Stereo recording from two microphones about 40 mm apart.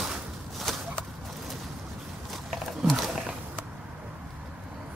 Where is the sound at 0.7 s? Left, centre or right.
Centre.